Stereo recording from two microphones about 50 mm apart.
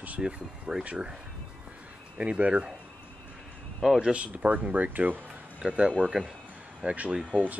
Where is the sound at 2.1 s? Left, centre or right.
Right.